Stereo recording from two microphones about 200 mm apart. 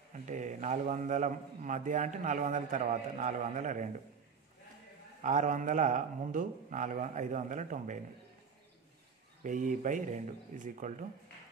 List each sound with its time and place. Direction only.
0.1 s a man's voice: 40° right (ahead or behind)
5.2 s a man's voice: 40° right (ahead or behind)
9.4 s a man's voice: 40° right (ahead or behind)